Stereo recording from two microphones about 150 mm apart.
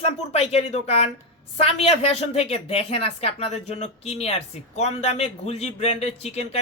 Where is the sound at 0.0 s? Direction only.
45° left (ahead or behind).